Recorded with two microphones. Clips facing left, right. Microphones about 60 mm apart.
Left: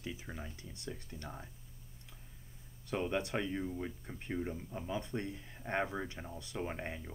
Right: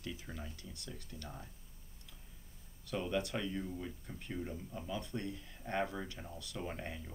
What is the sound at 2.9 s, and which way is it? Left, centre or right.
Speech, left.